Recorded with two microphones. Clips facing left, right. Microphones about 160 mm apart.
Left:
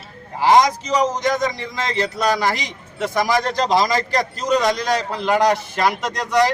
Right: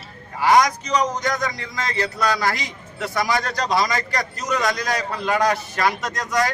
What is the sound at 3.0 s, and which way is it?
A man's voice, 25° left (ahead or behind).